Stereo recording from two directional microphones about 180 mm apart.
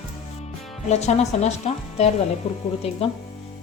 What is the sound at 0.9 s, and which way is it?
Speech, 40° left (ahead or behind).